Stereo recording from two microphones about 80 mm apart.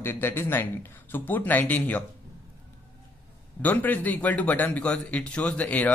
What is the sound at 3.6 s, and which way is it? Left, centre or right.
A man's voice, left.